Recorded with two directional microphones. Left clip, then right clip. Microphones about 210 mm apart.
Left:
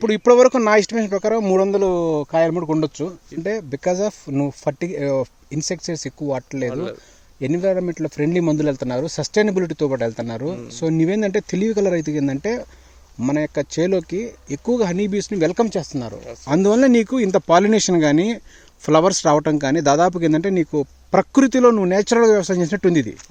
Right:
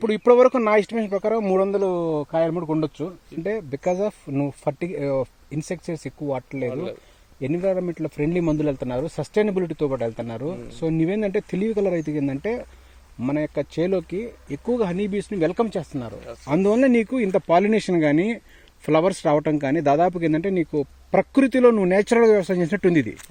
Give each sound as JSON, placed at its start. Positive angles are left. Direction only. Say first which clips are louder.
{"t": 0.0, "sound": "speech", "louder": "left 3 dB", "side_deg": 20}
{"t": 6.7, "sound": "speech", "louder": "left 2 dB", "side_deg": 40}
{"t": 7.4, "sound": "speech", "louder": "left 4 dB", "side_deg": 15}